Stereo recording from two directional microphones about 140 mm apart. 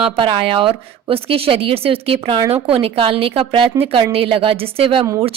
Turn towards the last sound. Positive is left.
turn(degrees=-40)  # may be behind; listen again after turning